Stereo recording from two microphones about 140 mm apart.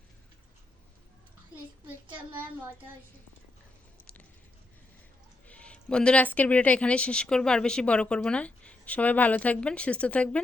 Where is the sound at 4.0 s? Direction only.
10° left (ahead or behind).